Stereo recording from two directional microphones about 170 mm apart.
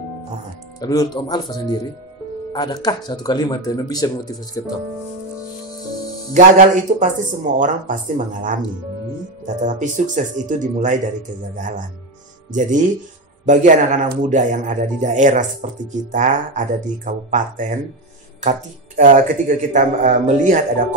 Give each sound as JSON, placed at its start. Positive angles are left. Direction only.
{"t": 0.7, "sound": "speech", "side_deg": 20}
{"t": 6.3, "sound": "speech", "side_deg": -50}
{"t": 9.6, "sound": "speech", "side_deg": -45}